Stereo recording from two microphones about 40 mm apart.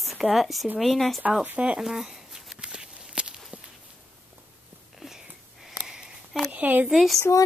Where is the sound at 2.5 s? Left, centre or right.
Right.